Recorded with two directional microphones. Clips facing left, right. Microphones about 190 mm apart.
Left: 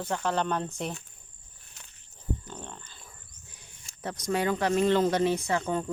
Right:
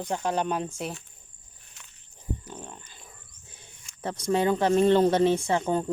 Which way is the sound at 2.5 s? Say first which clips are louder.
Right 1 dB; 10° right (ahead or behind).